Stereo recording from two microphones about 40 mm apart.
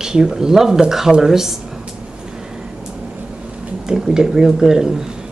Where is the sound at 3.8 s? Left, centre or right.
Centre.